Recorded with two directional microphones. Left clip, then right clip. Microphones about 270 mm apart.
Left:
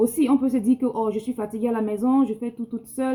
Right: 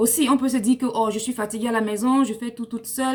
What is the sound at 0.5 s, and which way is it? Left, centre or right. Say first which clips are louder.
Speech: right 1 dB; right.